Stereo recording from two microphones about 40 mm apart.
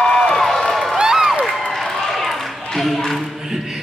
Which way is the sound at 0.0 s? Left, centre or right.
Centre.